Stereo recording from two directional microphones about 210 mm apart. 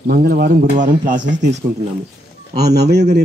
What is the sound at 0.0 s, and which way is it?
Speech, 45° right (ahead or behind).